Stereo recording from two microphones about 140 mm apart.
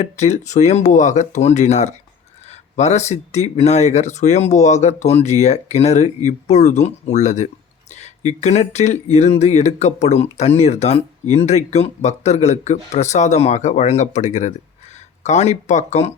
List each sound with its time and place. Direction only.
0.0 s speech: 55° left (ahead or behind)